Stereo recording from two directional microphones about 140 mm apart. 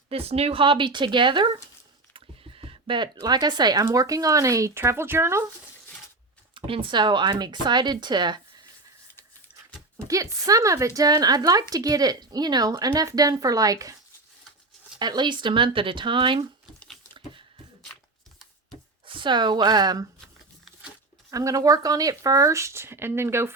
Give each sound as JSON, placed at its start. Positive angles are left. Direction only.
{"t": 0.1, "sound": "speech", "side_deg": -45}
{"t": 2.1, "sound": "a sound", "side_deg": -40}
{"t": 3.8, "sound": "speech", "side_deg": -25}
{"t": 6.5, "sound": "speech", "side_deg": -40}
{"t": 10.1, "sound": "speech", "side_deg": -25}
{"t": 14.9, "sound": "speech", "side_deg": -30}
{"t": 19.0, "sound": "a woman's voice", "side_deg": -35}
{"t": 21.2, "sound": "speech", "side_deg": -25}